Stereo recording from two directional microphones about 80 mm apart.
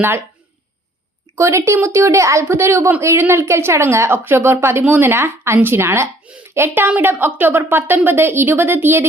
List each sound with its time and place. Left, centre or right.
1.4 s a woman's voice: right